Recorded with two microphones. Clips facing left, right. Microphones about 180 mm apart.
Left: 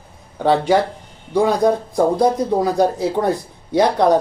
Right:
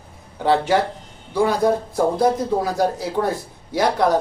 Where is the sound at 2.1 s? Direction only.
5° right (ahead or behind).